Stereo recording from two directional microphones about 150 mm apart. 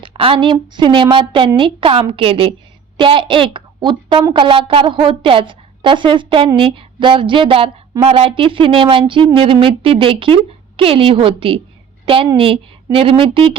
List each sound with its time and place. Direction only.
0.0 s a woman's voice: 35° right (ahead or behind)